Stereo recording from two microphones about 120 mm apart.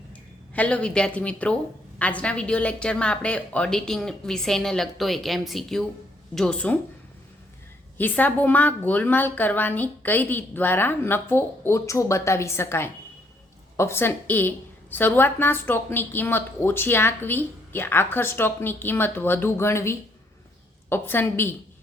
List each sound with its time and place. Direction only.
0.5 s a woman's voice: 10° left (ahead or behind)
7.9 s a woman's voice: 15° left (ahead or behind)